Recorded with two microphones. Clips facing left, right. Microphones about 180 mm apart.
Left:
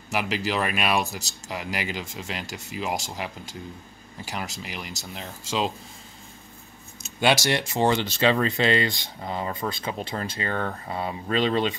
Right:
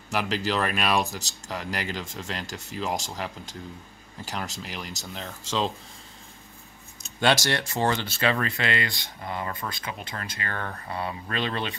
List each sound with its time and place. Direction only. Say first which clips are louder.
0.1 s speech: even; 5° left (ahead or behind)
7.0 s a sound: left 1 dB; 10° left (ahead or behind)
7.4 s speech: left 3 dB; 15° left (ahead or behind)
10.5 s speech: left 3 dB; 15° left (ahead or behind)